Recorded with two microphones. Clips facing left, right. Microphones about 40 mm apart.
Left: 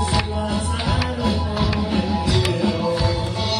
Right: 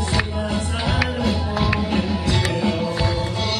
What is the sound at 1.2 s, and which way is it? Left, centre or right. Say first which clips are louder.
Music: right 1 dB; right.